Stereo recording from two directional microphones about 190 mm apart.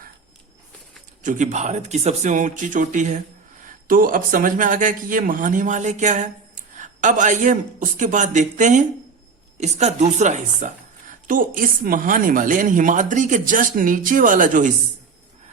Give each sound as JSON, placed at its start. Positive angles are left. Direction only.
{"t": 1.2, "sound": "a man's voice", "side_deg": -40}